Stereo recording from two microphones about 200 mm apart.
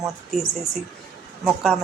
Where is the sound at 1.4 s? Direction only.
Centre (ahead or behind).